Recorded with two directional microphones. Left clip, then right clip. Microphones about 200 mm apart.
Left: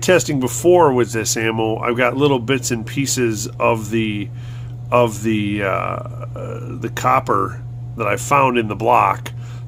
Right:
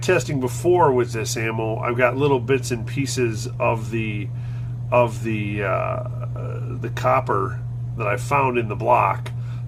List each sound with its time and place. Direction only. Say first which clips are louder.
0.0 s speech: left 5 dB; 50° left (ahead or behind)